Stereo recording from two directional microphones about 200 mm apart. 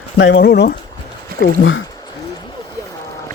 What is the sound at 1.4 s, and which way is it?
Speech, 80° left.